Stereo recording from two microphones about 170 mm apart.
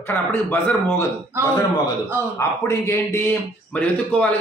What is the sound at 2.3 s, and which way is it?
Speech, 15° left (ahead or behind).